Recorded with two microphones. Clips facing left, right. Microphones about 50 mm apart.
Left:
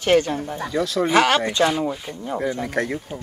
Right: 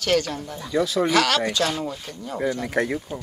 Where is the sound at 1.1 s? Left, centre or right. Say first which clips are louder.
Left 3 dB; left.